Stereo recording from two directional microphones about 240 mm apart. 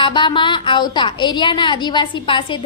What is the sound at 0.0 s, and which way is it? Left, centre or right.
A woman's voice, centre.